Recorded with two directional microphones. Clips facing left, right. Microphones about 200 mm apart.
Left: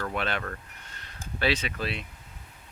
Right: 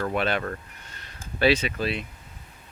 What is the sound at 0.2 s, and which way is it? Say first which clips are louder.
Speech: right 5 dB; 10° right (ahead or behind).